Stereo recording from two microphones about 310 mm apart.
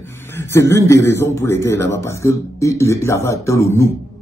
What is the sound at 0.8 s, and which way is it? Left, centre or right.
Speech, centre.